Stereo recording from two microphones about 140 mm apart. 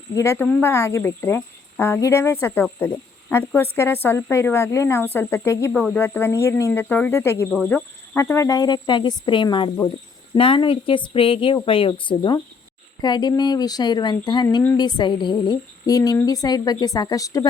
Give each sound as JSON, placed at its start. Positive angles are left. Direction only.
{"t": 0.1, "sound": "speech", "side_deg": 20}
{"t": 5.7, "sound": "speech", "side_deg": 10}
{"t": 10.3, "sound": "speech", "side_deg": 40}